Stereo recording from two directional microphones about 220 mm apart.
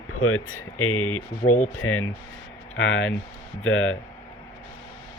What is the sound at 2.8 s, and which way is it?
Speech, 60° left (ahead or behind).